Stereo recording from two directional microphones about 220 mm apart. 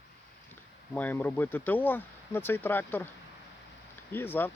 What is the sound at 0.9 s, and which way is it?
Speech, 5° left (ahead or behind).